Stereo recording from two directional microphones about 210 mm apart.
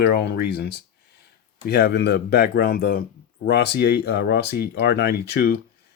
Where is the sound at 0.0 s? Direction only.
50° left (ahead or behind).